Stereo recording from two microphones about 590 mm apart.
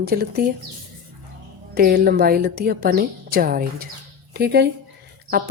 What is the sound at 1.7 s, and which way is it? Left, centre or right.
Speech, centre.